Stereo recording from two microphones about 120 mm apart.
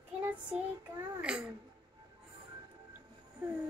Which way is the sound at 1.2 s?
5° right (ahead or behind).